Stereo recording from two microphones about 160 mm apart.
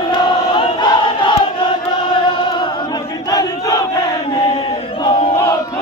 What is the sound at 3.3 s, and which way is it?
Battle cry, 25° left (ahead or behind).